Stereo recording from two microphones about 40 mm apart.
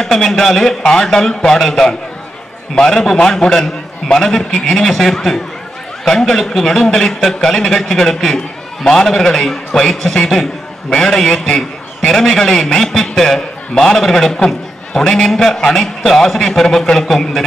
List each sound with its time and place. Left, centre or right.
0.0 s a man's voice: centre